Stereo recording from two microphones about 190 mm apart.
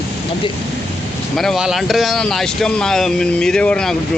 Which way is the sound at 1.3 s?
Centre (ahead or behind).